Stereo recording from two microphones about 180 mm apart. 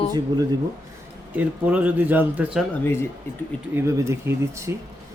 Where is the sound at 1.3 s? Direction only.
10° right (ahead or behind).